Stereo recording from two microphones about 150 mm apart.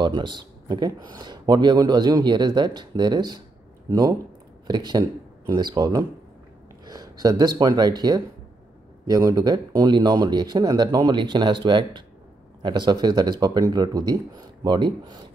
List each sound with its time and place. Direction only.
0.0 s speech: 30° right (ahead or behind)